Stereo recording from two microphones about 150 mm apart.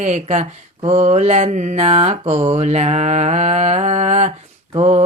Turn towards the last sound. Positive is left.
turn(degrees=-40)  # may be behind; listen again after turning